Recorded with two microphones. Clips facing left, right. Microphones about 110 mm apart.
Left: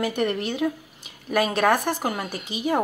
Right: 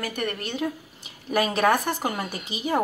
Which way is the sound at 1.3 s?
Centre (ahead or behind).